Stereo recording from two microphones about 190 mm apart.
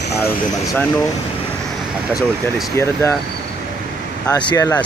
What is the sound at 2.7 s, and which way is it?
Speech, 15° left (ahead or behind).